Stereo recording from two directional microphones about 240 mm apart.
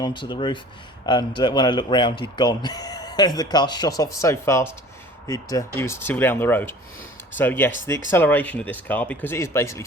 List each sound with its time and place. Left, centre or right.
0.0 s speech: centre